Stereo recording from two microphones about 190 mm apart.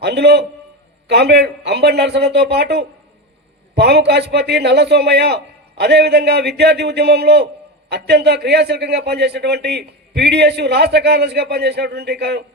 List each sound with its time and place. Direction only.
0.0 s a man's voice: 60° right (ahead or behind)